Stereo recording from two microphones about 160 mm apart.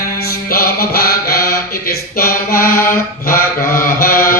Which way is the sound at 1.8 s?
70° left (ahead or behind).